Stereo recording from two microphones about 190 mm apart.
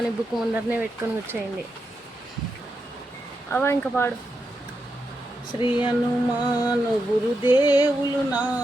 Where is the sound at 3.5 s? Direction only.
10° left (ahead or behind).